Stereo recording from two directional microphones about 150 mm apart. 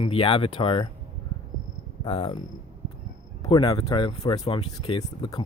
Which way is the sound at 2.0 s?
35° left (ahead or behind).